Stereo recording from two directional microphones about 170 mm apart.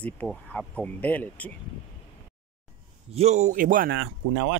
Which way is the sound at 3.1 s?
40° right (ahead or behind).